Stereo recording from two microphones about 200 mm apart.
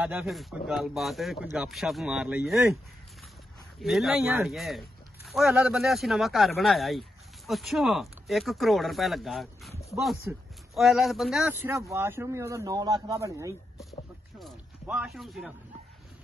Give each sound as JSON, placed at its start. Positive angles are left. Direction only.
{"t": 0.0, "sound": "speech", "side_deg": -5}
{"t": 3.8, "sound": "speech", "side_deg": 0}
{"t": 11.9, "sound": "speech", "side_deg": -15}
{"t": 14.4, "sound": "a sound", "side_deg": -5}